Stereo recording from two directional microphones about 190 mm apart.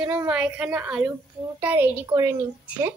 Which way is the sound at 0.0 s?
5° right (ahead or behind).